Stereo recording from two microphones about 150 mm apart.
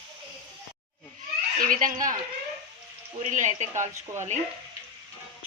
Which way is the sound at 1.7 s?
65° right (ahead or behind).